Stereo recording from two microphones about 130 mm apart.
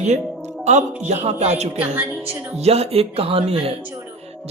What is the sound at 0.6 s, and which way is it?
Speech, 60° right (ahead or behind).